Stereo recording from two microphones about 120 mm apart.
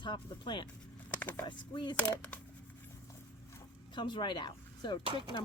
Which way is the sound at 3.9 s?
40° left (ahead or behind).